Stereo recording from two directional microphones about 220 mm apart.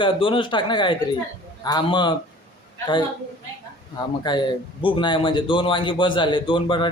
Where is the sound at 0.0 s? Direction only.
25° left (ahead or behind).